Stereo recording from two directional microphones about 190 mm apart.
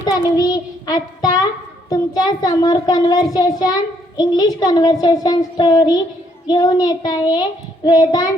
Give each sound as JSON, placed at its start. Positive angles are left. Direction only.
{"t": 0.0, "sound": "child singing", "side_deg": 20}
{"t": 1.9, "sound": "a child's voice", "side_deg": 20}